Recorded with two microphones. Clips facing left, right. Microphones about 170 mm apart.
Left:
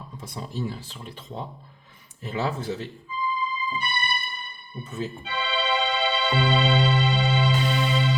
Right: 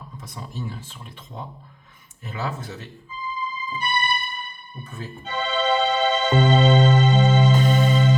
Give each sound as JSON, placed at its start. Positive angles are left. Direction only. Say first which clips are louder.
{"t": 0.2, "sound": "speech", "louder": "left 3 dB", "side_deg": 35}
{"t": 3.1, "sound": "music", "louder": "left 3 dB", "side_deg": -45}
{"t": 4.8, "sound": "speech", "louder": "left 5 dB", "side_deg": 20}
{"t": 5.2, "sound": "music", "louder": "right 8 dB", "side_deg": -45}